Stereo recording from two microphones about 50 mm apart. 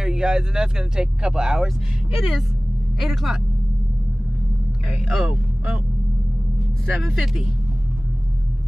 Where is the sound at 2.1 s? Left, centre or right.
Centre.